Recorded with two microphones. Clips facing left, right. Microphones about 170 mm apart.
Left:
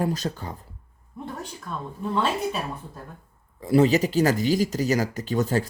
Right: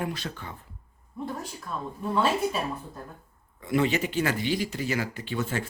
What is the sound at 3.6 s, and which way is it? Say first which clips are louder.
Speech: left 6 dB; 35° left (ahead or behind).